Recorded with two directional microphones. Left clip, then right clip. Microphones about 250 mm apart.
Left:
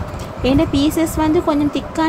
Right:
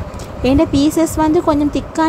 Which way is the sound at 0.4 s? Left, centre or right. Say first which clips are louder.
Right 2 dB; centre.